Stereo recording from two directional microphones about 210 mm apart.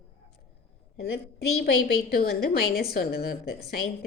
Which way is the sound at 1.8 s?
45° left (ahead or behind).